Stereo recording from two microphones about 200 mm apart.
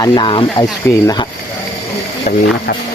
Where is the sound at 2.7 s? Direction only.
50° left (ahead or behind).